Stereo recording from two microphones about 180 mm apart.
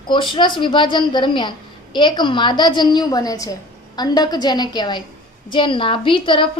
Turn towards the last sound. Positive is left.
turn(degrees=30)  # may be behind; listen again after turning